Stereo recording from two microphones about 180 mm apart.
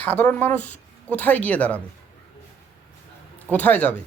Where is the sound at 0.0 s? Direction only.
10° left (ahead or behind).